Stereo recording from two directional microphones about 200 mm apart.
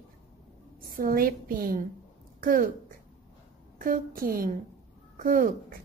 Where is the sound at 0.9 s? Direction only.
45° right (ahead or behind).